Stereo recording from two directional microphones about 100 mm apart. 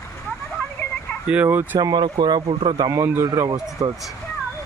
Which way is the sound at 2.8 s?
30° right (ahead or behind).